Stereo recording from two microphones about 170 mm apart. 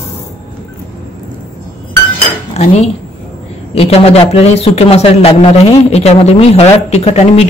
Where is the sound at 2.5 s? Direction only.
40° left (ahead or behind).